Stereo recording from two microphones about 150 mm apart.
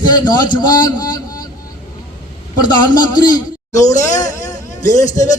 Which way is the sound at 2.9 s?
65° left (ahead or behind).